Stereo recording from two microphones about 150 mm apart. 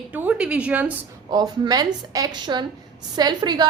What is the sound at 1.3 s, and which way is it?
A woman's voice, 25° right (ahead or behind).